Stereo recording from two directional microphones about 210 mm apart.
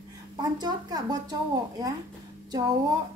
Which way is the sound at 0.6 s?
20° right (ahead or behind).